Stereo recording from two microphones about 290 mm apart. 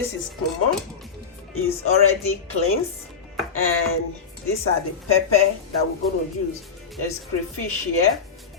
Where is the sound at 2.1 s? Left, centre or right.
Left.